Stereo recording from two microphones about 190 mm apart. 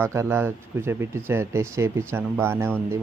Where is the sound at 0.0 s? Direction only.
15° right (ahead or behind).